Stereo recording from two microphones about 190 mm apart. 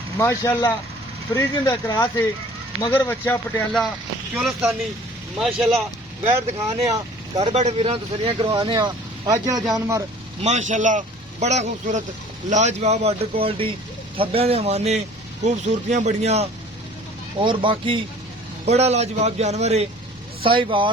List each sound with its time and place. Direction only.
0.2 s speech: 15° left (ahead or behind)
7.3 s speech: 35° right (ahead or behind); by 10.0 s 15° right (ahead or behind)
10.4 s speech: 40° right (ahead or behind)